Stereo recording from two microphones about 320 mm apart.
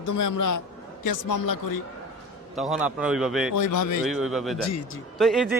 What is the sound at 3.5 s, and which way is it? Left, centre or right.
Speech, left.